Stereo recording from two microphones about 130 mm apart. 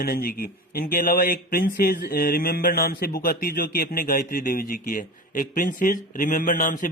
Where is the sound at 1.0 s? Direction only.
90° left.